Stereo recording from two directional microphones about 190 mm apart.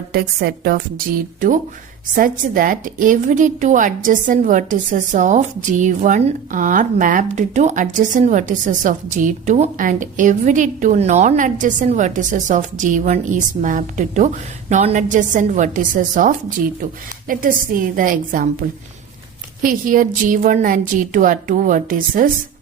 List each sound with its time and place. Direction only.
0.1 s a woman's voice: 55° right (ahead or behind)
19.6 s a woman's voice: 45° right (ahead or behind)